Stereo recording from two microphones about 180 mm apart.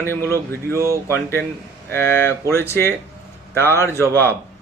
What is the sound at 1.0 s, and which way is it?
A man's voice, 15° left (ahead or behind).